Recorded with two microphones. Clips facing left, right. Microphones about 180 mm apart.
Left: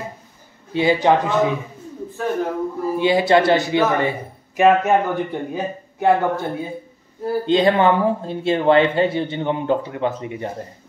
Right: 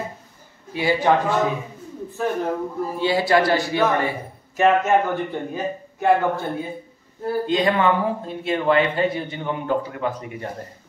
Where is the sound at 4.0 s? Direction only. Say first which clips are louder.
Left 3 dB; 20° left (ahead or behind).